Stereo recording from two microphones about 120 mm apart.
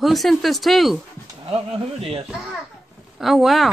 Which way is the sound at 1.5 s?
55° right (ahead or behind).